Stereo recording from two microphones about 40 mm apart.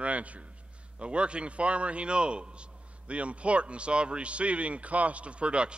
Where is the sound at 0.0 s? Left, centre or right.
Right.